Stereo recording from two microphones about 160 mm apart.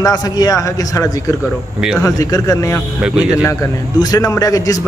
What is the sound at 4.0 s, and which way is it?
Speech, 20° left (ahead or behind).